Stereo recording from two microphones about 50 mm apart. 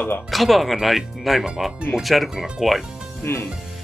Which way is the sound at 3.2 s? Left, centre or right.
Left.